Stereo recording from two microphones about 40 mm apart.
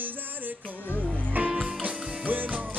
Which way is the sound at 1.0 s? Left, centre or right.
Left.